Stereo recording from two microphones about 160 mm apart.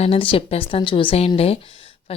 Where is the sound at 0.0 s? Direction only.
35° left (ahead or behind).